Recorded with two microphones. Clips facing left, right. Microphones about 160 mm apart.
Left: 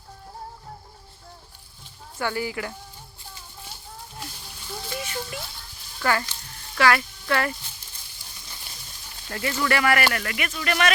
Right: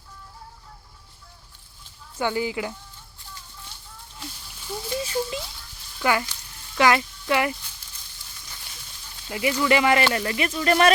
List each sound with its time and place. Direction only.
2.1 s speech: 20° right (ahead or behind)
4.9 s speech: 30° right (ahead or behind)
6.0 s speech: 15° right (ahead or behind)
9.3 s speech: 15° right (ahead or behind); by 10.9 s 35° right (ahead or behind)